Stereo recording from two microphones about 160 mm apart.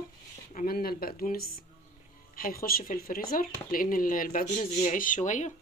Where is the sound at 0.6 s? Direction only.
70° left (ahead or behind); by 5.5 s 50° left (ahead or behind).